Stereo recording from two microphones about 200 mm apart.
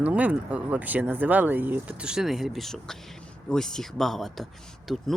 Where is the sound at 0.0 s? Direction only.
5° right (ahead or behind).